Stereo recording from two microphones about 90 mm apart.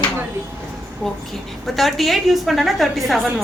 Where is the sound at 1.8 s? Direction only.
Centre (ahead or behind).